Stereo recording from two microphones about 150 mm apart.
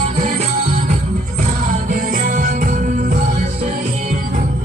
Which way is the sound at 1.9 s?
65° right (ahead or behind).